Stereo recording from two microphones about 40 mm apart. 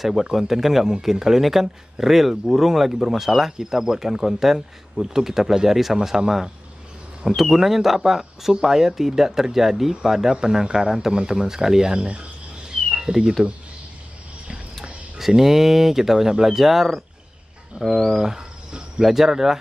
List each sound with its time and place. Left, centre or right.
0.0 s speech: centre
15.1 s speech: centre
18.1 s speech: centre